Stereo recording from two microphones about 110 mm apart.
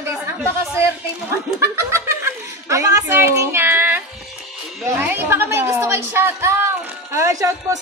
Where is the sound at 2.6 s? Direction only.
30° right (ahead or behind).